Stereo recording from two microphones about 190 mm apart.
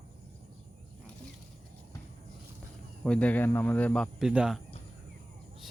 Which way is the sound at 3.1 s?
5° left (ahead or behind).